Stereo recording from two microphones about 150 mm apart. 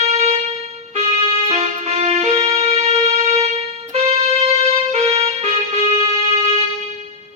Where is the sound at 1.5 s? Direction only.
50° right (ahead or behind).